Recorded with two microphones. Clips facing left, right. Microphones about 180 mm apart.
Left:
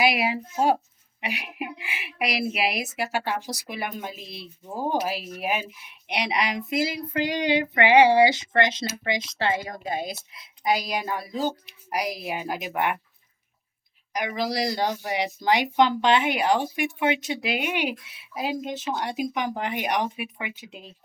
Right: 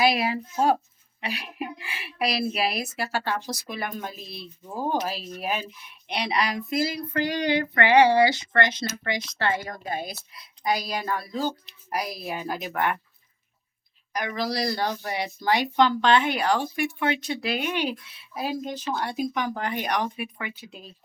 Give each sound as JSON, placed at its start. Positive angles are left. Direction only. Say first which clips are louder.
{"t": 0.0, "sound": "a woman's voice", "louder": "right 1 dB", "side_deg": 15}
{"t": 14.1, "sound": "a woman's voice", "louder": "left 1 dB", "side_deg": 20}